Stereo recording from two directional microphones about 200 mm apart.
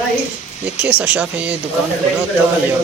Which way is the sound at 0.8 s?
10° right (ahead or behind).